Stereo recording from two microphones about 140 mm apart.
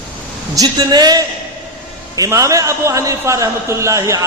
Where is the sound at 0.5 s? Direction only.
30° right (ahead or behind).